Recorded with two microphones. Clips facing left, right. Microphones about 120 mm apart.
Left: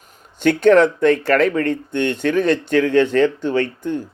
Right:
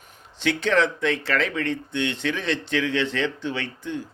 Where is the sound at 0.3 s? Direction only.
50° left (ahead or behind).